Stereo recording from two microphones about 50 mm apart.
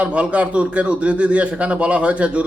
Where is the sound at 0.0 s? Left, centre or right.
Right.